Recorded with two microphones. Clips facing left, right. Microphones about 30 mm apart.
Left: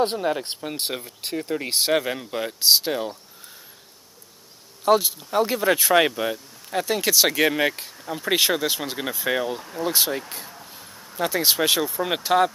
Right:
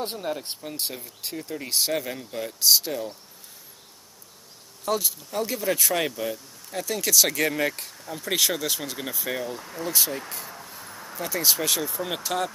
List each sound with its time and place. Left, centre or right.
0.2 s speech: left
0.6 s speech: left
4.8 s speech: left
7.8 s speech: centre
8.2 s speech: left
9.6 s speech: centre
9.8 s speech: left
10.6 s a sound: centre
10.9 s a sound: right
11.1 s speech: left